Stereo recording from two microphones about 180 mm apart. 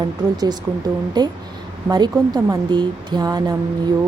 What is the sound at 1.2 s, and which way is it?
A woman's voice, 25° right (ahead or behind).